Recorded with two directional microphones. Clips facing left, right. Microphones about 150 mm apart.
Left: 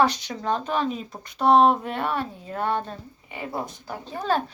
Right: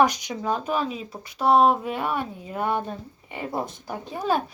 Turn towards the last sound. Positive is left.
turn(degrees=-10)  # may be behind; listen again after turning